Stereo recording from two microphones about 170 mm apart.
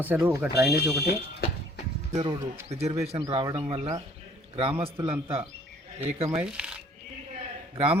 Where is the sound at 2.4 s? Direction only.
40° right (ahead or behind).